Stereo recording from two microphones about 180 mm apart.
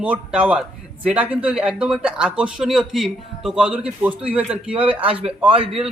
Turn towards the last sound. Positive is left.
turn(degrees=-30)  # may be behind; listen again after turning